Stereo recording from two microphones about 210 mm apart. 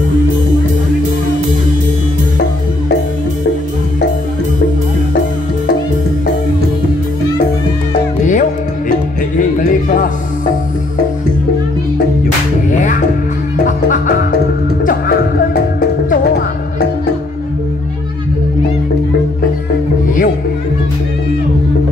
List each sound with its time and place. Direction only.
8.3 s music: 35° left (ahead or behind)
12.7 s music: 35° left (ahead or behind)